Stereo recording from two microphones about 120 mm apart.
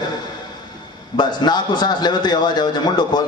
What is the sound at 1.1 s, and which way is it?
A man's voice, 35° left (ahead or behind).